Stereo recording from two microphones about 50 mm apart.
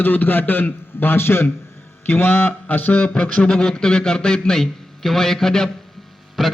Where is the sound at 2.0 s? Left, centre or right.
Left.